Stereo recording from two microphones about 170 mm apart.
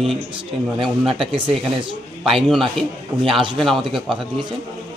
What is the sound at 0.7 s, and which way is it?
Speech, 30° right (ahead or behind).